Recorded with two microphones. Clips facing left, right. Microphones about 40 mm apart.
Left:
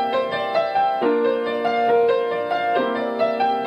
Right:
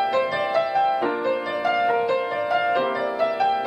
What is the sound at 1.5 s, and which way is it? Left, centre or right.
Music, centre.